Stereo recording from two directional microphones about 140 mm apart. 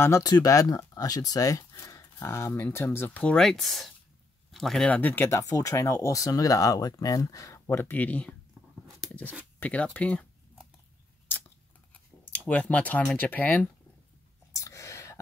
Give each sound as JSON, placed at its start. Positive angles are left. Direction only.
{"t": 0.0, "sound": "speech", "side_deg": 20}
{"t": 5.4, "sound": "speech", "side_deg": 25}
{"t": 9.6, "sound": "speech", "side_deg": 10}
{"t": 11.9, "sound": "speech", "side_deg": 10}
{"t": 14.5, "sound": "a sound", "side_deg": 20}